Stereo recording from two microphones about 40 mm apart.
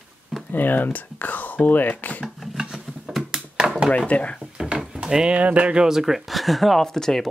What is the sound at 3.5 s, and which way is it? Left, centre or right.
Chop, centre.